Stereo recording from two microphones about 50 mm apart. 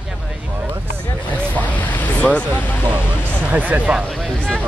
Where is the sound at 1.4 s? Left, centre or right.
Left.